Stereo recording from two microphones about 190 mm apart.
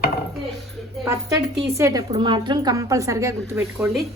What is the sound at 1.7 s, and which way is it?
A woman's voice, 15° right (ahead or behind).